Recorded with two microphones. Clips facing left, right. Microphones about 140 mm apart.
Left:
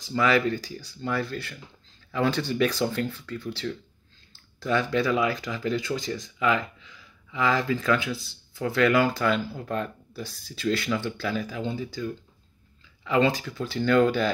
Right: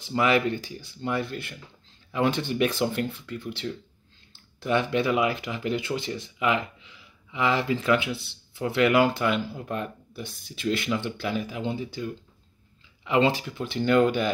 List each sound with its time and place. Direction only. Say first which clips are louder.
0.0 s speech: even; 25° right (ahead or behind)